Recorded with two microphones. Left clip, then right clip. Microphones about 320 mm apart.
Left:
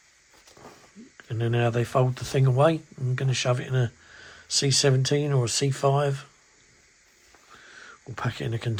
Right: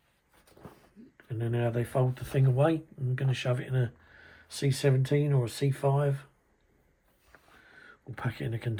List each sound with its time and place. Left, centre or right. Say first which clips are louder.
1.1 s speech: left 6 dB; left
7.9 s speech: left 6 dB; centre